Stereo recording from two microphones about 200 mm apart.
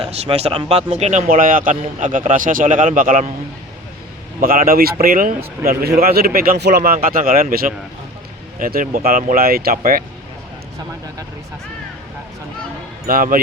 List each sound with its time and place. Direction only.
0.1 s speech: 30° right (ahead or behind)
4.4 s speech: 45° right (ahead or behind)
5.6 s a man's voice: 15° right (ahead or behind)
6.0 s speech: 50° right (ahead or behind)
13.1 s speech: 45° right (ahead or behind)